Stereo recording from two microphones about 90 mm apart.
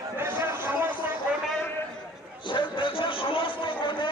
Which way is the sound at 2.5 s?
65° left (ahead or behind).